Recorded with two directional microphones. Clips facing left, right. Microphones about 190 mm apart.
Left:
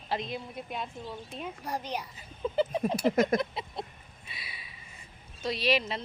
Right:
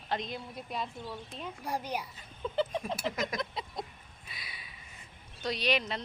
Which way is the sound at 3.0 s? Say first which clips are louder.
Left 13 dB; 45° left (ahead or behind).